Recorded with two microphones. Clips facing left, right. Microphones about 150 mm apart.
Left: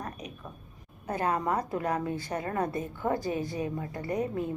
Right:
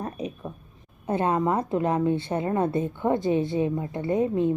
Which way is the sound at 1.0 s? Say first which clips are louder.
Right 5 dB; 25° right (ahead or behind).